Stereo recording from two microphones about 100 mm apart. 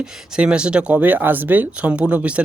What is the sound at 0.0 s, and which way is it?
Speech, 10° right (ahead or behind).